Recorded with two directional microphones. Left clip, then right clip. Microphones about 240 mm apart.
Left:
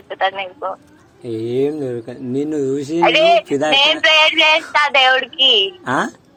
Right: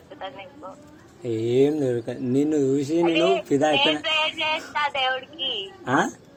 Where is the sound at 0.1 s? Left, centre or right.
Left.